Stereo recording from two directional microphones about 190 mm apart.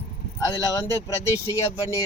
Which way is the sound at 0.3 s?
15° left (ahead or behind).